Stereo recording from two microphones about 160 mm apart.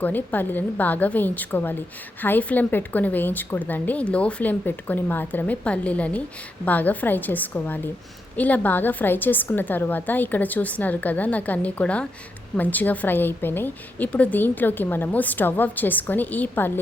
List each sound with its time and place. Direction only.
0.0 s a woman's voice: 10° left (ahead or behind)